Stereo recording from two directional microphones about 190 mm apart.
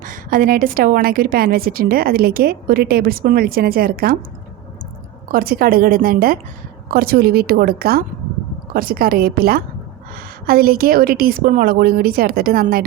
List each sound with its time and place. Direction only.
0.0 s a woman's voice: 45° right (ahead or behind)
5.3 s a woman's voice: 50° right (ahead or behind)